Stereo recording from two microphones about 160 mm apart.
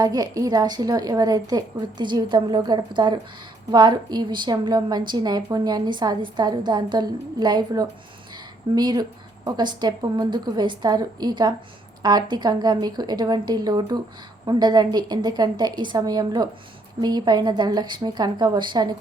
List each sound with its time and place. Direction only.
0.0 s a woman's voice: 25° right (ahead or behind)